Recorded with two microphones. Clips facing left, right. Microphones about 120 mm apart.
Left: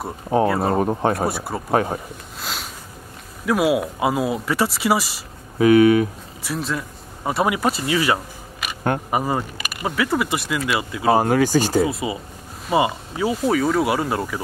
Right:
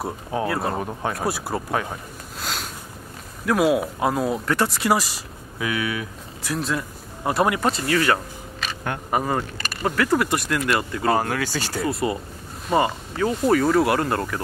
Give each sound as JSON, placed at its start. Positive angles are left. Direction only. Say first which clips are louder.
{"t": 0.5, "sound": "speech", "louder": "left 5 dB", "side_deg": 0}
{"t": 0.7, "sound": "speech", "louder": "left 7 dB", "side_deg": 40}
{"t": 1.3, "sound": "speech", "louder": "even", "side_deg": 0}
{"t": 1.7, "sound": "speech", "louder": "left 9 dB", "side_deg": 35}
{"t": 2.4, "sound": "a sound", "louder": "even", "side_deg": 0}
{"t": 3.4, "sound": "speech", "louder": "left 1 dB", "side_deg": 0}
{"t": 5.6, "sound": "speech", "louder": "left 13 dB", "side_deg": 40}
{"t": 6.4, "sound": "speech", "louder": "even", "side_deg": 0}
{"t": 11.1, "sound": "speech", "louder": "left 6 dB", "side_deg": 20}
{"t": 11.8, "sound": "speech", "louder": "left 2 dB", "side_deg": 0}